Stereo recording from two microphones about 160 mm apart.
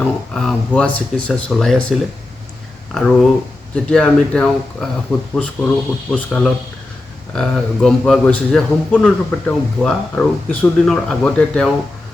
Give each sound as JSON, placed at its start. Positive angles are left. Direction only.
{"t": 0.0, "sound": "a man's voice", "side_deg": 5}
{"t": 2.9, "sound": "a man's voice", "side_deg": 0}